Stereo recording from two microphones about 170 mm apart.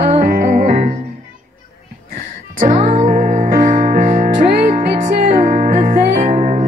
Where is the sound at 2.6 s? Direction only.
50° right (ahead or behind).